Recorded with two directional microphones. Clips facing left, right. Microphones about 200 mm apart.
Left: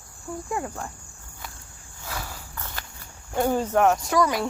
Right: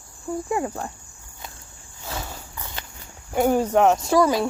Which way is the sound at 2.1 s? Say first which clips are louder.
Right 3 dB; 25° right (ahead or behind).